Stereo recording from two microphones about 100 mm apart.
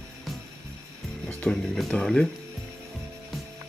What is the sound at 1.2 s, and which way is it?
Speech, 5° left (ahead or behind).